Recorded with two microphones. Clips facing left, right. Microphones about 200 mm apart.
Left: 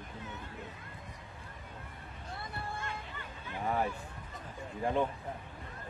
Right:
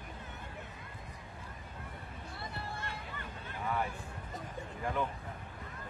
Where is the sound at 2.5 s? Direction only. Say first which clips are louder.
Left 3 dB; 50° left (ahead or behind).